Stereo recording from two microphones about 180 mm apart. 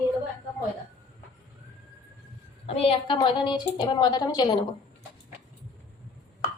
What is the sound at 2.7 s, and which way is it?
A woman's voice, 30° left (ahead or behind).